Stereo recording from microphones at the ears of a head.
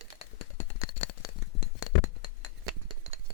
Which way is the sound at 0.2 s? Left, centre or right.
Left.